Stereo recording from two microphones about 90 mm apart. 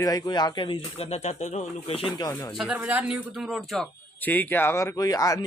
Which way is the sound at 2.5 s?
15° right (ahead or behind).